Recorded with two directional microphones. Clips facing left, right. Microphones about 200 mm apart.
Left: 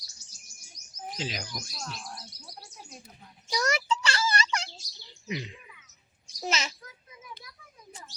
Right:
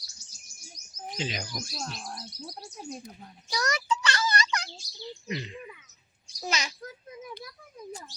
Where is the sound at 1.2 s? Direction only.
Centre (ahead or behind).